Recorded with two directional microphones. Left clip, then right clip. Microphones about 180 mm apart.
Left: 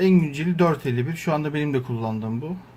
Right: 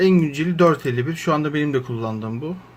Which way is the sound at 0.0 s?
10° right (ahead or behind).